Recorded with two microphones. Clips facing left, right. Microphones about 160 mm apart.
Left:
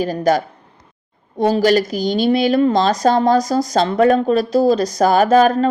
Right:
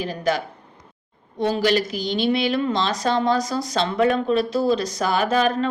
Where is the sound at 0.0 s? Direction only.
40° left (ahead or behind).